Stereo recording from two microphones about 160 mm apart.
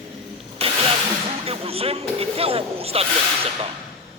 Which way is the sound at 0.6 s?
40° right (ahead or behind).